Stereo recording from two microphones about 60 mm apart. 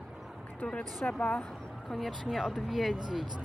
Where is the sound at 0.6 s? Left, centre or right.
Left.